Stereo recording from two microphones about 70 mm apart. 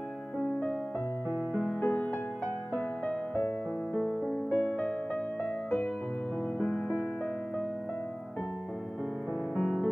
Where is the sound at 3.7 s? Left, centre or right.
Centre.